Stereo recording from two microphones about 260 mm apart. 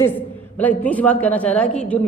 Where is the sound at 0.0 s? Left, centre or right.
Centre.